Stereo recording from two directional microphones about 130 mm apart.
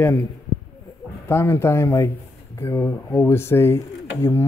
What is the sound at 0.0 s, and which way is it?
Speech, 20° left (ahead or behind).